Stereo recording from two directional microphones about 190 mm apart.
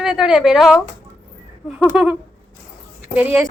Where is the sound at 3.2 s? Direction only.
10° right (ahead or behind).